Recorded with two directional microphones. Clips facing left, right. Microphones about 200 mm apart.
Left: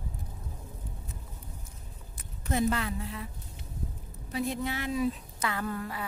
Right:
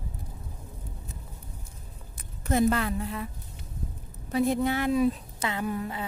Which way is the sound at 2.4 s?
50° right (ahead or behind).